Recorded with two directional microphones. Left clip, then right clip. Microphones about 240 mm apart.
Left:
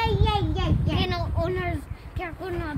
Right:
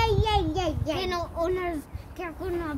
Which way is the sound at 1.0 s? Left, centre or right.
Right.